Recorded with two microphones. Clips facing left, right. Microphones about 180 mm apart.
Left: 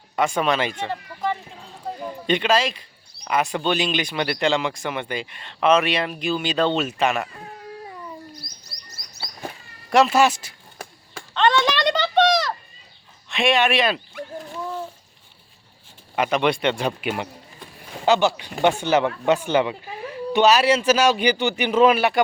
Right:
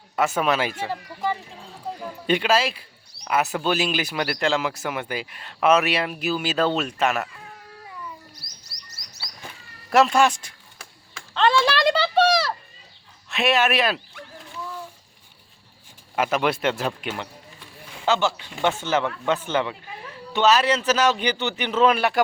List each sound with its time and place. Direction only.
0.2 s speech: 5° right (ahead or behind)
7.3 s baby cry: 40° left (ahead or behind)
9.9 s speech: centre (ahead or behind)
11.3 s a sound: 5° right (ahead or behind)
13.2 s speech: 5° right (ahead or behind)
14.5 s a sound: 45° left (ahead or behind)
16.1 s speech: 5° right (ahead or behind)
17.0 s speech: 10° left (ahead or behind)